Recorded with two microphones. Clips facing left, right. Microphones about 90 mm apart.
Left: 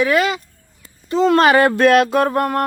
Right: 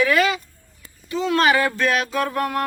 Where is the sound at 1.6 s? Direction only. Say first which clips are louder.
Left 9 dB; 60° left (ahead or behind); by 2.6 s 35° left (ahead or behind).